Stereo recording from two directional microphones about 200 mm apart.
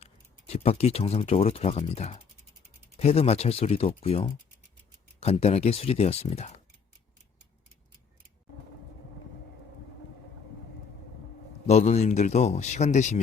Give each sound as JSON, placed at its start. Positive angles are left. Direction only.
{"t": 0.0, "sound": "speech", "side_deg": 30}
{"t": 11.7, "sound": "speech", "side_deg": 35}